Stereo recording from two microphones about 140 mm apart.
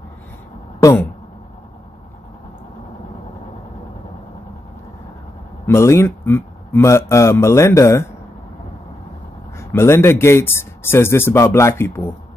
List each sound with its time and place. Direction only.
5.7 s a man's voice: 20° left (ahead or behind)
9.6 s a man's voice: 20° left (ahead or behind)